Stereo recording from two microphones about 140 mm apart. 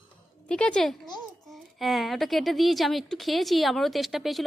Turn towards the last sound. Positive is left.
turn(degrees=0)  # may be behind; listen again after turning